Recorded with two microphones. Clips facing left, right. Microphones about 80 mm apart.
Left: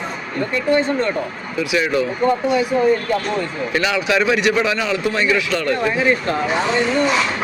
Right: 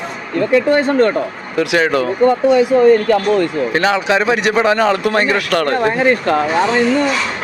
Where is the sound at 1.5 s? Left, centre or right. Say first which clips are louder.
Right 5 dB; right.